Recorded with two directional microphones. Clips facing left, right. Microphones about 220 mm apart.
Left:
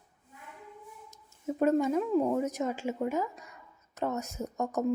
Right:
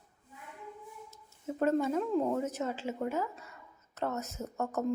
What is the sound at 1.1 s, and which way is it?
A woman's voice, 15° left (ahead or behind).